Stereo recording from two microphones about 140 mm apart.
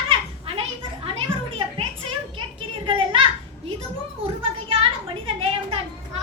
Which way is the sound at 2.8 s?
40° right (ahead or behind).